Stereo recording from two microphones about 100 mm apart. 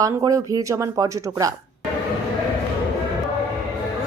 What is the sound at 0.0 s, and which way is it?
Speech, 35° right (ahead or behind).